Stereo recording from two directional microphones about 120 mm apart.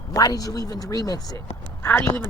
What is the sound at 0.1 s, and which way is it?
Speech, 30° left (ahead or behind).